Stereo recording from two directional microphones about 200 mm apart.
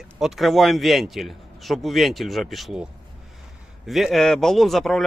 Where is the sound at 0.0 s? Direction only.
Centre (ahead or behind).